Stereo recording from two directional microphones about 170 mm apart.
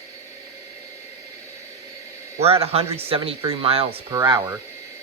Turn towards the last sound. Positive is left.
turn(degrees=-20)  # may be behind; listen again after turning